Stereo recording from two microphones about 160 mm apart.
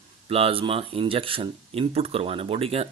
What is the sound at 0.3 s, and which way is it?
Speech, 35° right (ahead or behind).